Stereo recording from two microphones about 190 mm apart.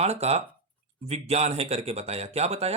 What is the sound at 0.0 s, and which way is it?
Speech, 35° right (ahead or behind).